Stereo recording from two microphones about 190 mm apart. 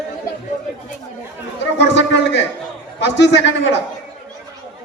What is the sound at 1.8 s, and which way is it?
A man's voice, 70° left (ahead or behind).